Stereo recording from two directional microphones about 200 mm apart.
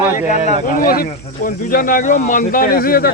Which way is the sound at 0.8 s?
45° left (ahead or behind).